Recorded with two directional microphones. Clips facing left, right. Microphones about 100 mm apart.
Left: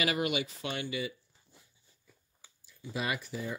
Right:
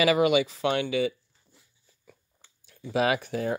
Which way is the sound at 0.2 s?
90° right.